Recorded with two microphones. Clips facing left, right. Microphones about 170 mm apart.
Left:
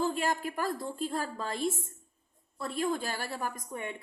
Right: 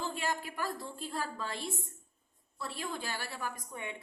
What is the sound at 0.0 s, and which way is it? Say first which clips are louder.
A woman's voice: left 6 dB; 45° left (ahead or behind).